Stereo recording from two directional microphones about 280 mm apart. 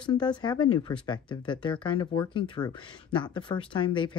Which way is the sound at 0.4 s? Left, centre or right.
Centre.